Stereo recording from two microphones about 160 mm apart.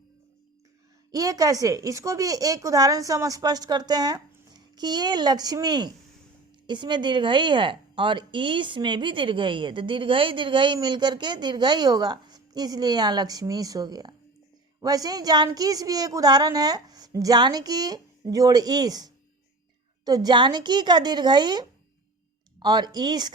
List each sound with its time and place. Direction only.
1.1 s a woman's voice: 20° right (ahead or behind)